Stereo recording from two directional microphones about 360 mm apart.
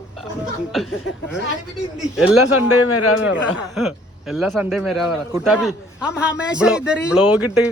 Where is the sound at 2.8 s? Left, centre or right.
Left.